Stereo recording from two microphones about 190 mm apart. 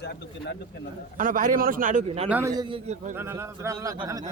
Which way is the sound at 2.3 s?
15° right (ahead or behind).